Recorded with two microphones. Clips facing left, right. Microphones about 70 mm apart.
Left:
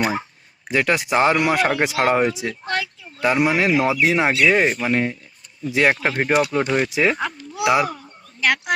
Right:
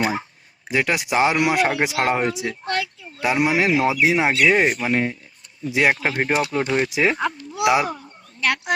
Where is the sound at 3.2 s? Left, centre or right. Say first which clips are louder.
Left 1 dB; centre.